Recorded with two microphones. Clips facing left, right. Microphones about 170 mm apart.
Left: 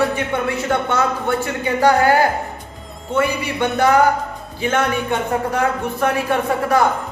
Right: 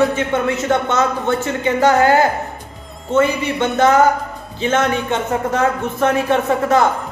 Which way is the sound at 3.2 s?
20° right (ahead or behind).